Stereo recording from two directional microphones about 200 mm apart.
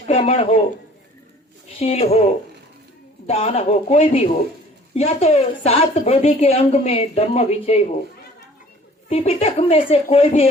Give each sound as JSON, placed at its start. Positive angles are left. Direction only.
{"t": 0.1, "sound": "a woman's voice", "side_deg": 30}
{"t": 1.8, "sound": "a woman's voice", "side_deg": 30}
{"t": 9.0, "sound": "a woman's voice", "side_deg": 30}